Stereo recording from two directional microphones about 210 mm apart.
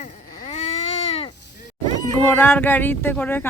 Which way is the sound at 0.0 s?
30° left (ahead or behind).